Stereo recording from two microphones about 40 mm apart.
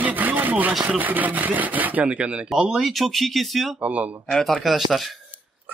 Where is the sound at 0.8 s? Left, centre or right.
Right.